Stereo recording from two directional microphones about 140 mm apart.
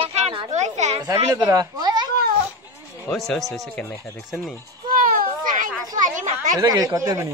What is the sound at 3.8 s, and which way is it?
Speech, 20° left (ahead or behind).